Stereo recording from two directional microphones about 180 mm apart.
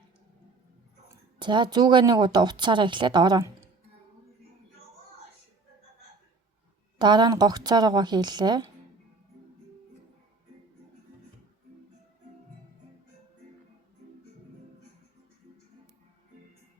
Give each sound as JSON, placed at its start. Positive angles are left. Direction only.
{"t": 1.4, "sound": "speech", "side_deg": -25}
{"t": 7.0, "sound": "speech", "side_deg": -25}